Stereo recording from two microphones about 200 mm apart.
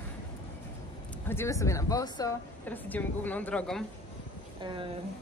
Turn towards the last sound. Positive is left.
turn(degrees=-25)  # may be behind; listen again after turning